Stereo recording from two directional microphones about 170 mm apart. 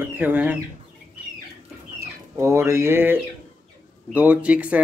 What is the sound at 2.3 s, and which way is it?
Speech, 15° right (ahead or behind).